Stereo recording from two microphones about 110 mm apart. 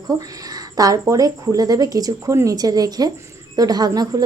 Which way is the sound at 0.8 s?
35° right (ahead or behind).